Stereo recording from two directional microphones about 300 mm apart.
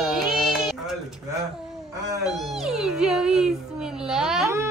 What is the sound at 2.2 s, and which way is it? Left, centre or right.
Speech, centre.